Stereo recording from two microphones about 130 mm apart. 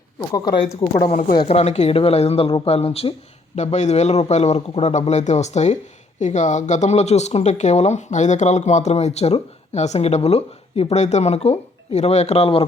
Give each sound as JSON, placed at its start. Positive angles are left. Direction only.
{"t": 0.3, "sound": "speech", "side_deg": 30}
{"t": 1.5, "sound": "speech", "side_deg": 60}